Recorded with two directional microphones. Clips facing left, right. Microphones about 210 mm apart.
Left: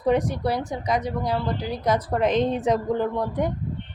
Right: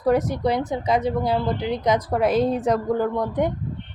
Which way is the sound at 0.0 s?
5° right (ahead or behind).